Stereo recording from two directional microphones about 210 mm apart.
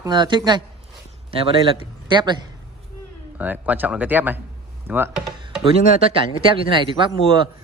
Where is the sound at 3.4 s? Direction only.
10° right (ahead or behind).